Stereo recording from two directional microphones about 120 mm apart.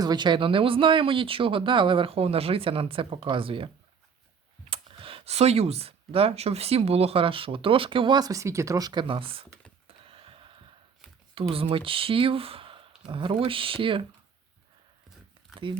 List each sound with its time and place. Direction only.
0.0 s speech: 35° right (ahead or behind)
4.7 s speech: 50° right (ahead or behind)
9.8 s a sound: 50° right (ahead or behind)
11.5 s speech: 50° right (ahead or behind)
15.6 s speech: 45° right (ahead or behind)